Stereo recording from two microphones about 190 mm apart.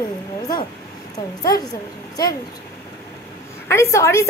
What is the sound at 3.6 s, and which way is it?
Speech, 15° left (ahead or behind).